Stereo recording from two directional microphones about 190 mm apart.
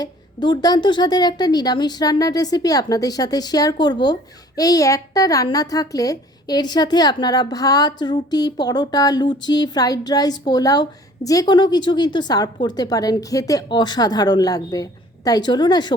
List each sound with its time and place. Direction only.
0.0 s a child's voice: 25° left (ahead or behind)